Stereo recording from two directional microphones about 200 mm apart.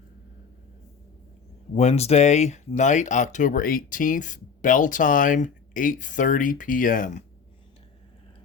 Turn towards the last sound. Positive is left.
turn(degrees=45)  # may be behind; listen again after turning